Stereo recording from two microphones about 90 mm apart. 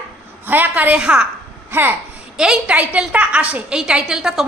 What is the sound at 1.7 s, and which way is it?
Speech, 25° right (ahead or behind).